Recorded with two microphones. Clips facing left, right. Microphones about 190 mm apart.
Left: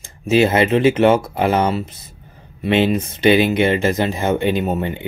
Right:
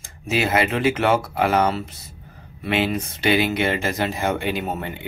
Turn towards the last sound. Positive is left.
turn(degrees=20)  # may be behind; listen again after turning